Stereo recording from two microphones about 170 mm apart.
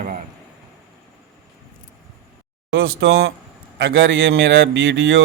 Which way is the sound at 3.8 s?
90° right.